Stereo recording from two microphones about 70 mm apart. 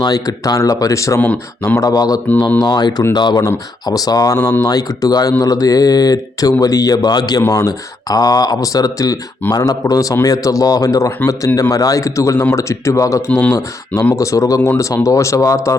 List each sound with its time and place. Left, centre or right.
0.0 s speech: left
1.2 s speech: left
1.8 s speech: left
2.6 s speech: left
3.8 s speech: left
7.5 s speech: left